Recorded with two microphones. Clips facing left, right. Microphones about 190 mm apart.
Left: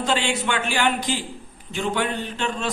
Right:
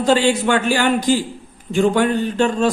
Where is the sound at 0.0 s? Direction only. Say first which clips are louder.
Right 8 dB; 40° right (ahead or behind).